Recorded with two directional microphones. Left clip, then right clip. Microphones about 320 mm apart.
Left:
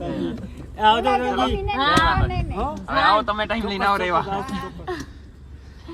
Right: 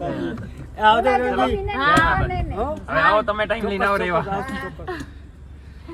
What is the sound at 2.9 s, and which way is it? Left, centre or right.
Speech, left.